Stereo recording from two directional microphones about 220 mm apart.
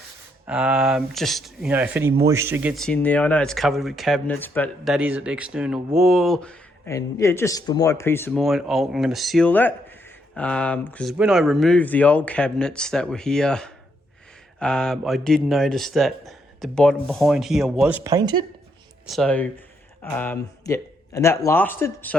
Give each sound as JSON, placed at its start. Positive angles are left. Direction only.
{"t": 0.4, "sound": "speech", "side_deg": -5}
{"t": 4.9, "sound": "speech", "side_deg": -5}
{"t": 8.4, "sound": "speech", "side_deg": 0}
{"t": 19.0, "sound": "speech", "side_deg": 0}